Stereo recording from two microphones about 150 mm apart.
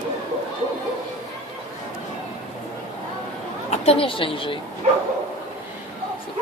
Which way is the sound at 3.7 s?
45° left (ahead or behind).